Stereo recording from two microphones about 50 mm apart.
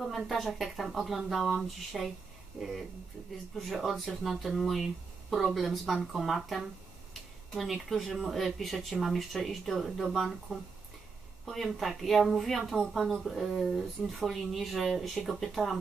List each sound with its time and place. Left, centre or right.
0.0 s speech: centre